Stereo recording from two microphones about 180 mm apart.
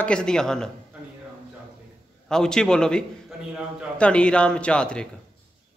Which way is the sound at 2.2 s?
5° left (ahead or behind).